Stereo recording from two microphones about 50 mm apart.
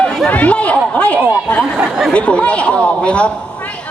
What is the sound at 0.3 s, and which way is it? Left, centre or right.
A man's voice, left.